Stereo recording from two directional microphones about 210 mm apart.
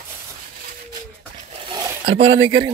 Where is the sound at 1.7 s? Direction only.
30° right (ahead or behind).